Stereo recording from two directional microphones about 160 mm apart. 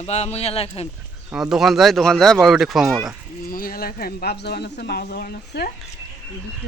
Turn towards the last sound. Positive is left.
turn(degrees=70)  # may be behind; listen again after turning